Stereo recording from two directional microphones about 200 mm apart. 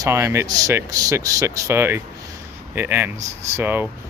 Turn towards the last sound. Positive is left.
turn(degrees=-10)  # may be behind; listen again after turning